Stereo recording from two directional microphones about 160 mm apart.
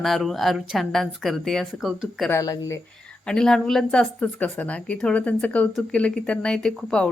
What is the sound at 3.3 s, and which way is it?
Speech, 5° left (ahead or behind).